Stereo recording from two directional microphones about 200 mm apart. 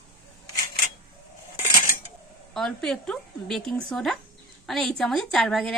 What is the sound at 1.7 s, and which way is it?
Cutlery, 45° left (ahead or behind).